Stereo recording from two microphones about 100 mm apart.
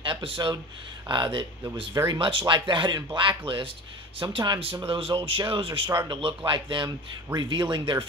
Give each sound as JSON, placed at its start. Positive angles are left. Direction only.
{"t": 0.0, "sound": "speech", "side_deg": -55}